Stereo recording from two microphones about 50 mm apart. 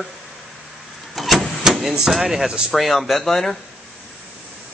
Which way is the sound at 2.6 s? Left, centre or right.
Centre.